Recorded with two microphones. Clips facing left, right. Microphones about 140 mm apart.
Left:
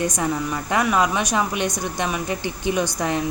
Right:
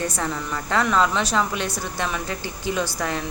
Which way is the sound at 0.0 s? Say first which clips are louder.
Left 4 dB; 15° left (ahead or behind).